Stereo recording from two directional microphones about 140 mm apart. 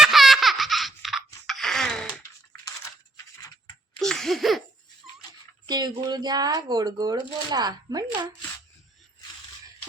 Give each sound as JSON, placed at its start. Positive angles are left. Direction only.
{"t": 0.0, "sound": "baby laughter", "side_deg": 0}
{"t": 1.5, "sound": "a sound", "side_deg": 0}
{"t": 4.0, "sound": "laughter", "side_deg": 5}
{"t": 5.6, "sound": "speech", "side_deg": -30}